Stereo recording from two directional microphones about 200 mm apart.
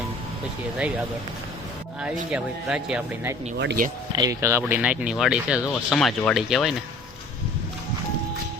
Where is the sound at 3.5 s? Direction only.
55° right (ahead or behind).